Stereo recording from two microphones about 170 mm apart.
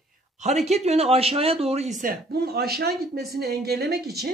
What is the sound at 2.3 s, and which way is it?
Speech, 65° right (ahead or behind).